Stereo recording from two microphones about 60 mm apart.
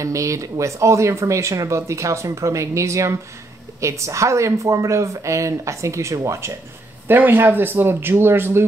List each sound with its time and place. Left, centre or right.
0.0 s speech: right
7.1 s speech: right